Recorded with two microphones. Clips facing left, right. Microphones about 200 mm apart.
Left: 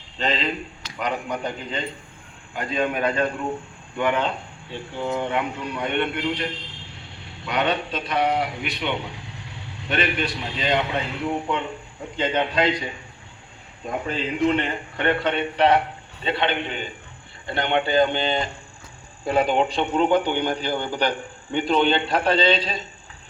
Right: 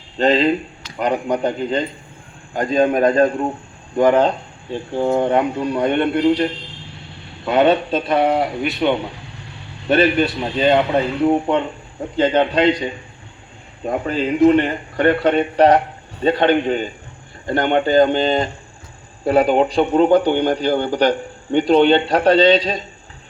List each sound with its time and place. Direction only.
0.2 s a man's voice: 35° right (ahead or behind)
7.9 s a man's voice: 45° right (ahead or behind)
13.8 s a man's voice: 40° right (ahead or behind)